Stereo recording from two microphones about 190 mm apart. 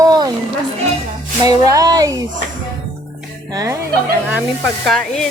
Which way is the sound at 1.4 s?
20° right (ahead or behind).